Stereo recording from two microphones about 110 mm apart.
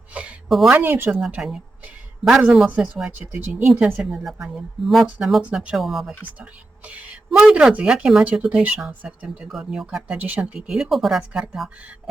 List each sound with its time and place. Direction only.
0.1 s a sound: 10° right (ahead or behind)
0.4 s speech: centre (ahead or behind)
0.7 s speech: 15° right (ahead or behind)
1.3 s a sound: 5° right (ahead or behind)
2.6 s speech: 15° right (ahead or behind)
6.4 s speech: 10° right (ahead or behind)
10.2 s speech: 15° right (ahead or behind)
10.4 s speech: 5° right (ahead or behind)